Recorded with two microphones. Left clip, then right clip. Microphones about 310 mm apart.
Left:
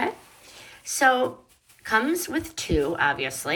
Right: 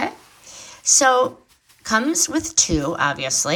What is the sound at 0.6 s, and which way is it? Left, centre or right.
Speech, centre.